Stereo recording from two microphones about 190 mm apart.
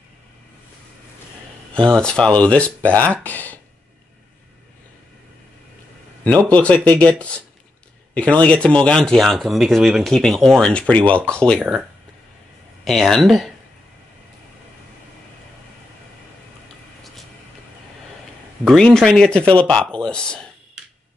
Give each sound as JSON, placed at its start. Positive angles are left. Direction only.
{"t": 2.0, "sound": "speech", "side_deg": 5}
{"t": 6.2, "sound": "speech", "side_deg": 5}
{"t": 12.8, "sound": "speech", "side_deg": 0}
{"t": 18.6, "sound": "speech", "side_deg": 0}